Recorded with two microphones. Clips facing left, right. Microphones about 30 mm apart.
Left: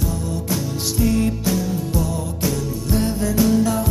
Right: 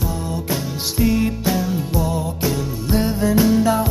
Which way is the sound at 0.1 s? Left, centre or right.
Right.